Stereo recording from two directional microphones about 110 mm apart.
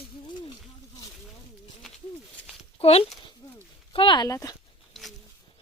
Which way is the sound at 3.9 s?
50° left (ahead or behind).